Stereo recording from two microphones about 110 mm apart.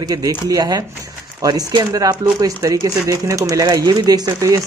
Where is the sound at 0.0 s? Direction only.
35° right (ahead or behind).